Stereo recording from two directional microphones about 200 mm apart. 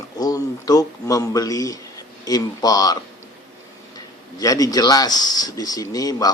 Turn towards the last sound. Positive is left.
turn(degrees=20)  # may be behind; listen again after turning